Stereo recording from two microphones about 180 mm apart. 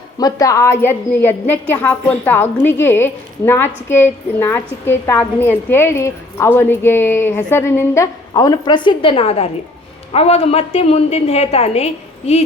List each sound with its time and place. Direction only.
0.2 s a woman's voice: 20° left (ahead or behind)